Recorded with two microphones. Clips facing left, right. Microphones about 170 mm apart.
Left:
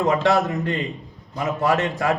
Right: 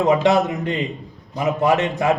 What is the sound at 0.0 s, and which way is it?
A man's voice, 20° right (ahead or behind).